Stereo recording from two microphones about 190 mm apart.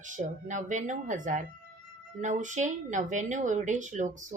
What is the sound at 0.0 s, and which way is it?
Speech, 40° right (ahead or behind).